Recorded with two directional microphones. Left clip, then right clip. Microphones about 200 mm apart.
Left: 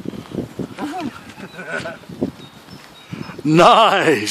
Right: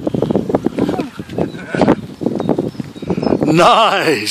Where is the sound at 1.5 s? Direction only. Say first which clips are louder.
Right 4 dB; centre (ahead or behind).